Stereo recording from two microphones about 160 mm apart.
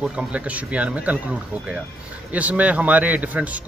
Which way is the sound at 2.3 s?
10° right (ahead or behind).